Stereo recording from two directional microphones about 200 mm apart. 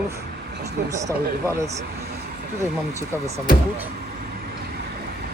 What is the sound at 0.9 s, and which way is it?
Speech, 15° right (ahead or behind).